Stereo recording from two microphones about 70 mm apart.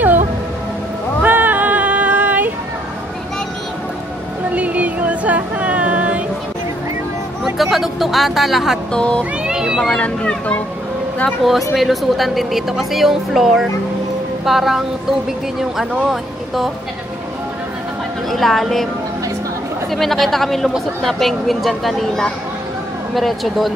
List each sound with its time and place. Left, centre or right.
1.2 s female singing: right
4.6 s a sound: right
7.4 s a sound: centre
8.9 s speech: centre
9.5 s cat: centre
9.9 s speech: centre
11.7 s speech: centre
18.3 s speech: centre
19.9 s speech: centre